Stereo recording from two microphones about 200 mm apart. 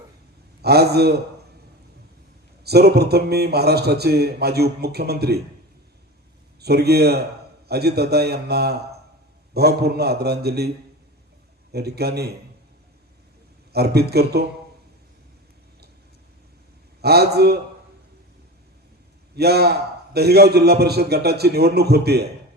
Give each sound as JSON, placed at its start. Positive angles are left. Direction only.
{"t": 0.6, "sound": "a man's voice", "side_deg": -55}
{"t": 2.6, "sound": "a man's voice", "side_deg": -55}
{"t": 6.6, "sound": "a man's voice", "side_deg": -55}
{"t": 11.7, "sound": "a man's voice", "side_deg": -55}
{"t": 13.7, "sound": "a man's voice", "side_deg": -55}
{"t": 17.0, "sound": "a man's voice", "side_deg": -55}
{"t": 19.4, "sound": "a man's voice", "side_deg": -55}